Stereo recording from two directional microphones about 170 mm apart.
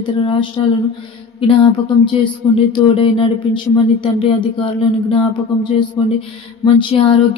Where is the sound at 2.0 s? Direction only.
30° left (ahead or behind).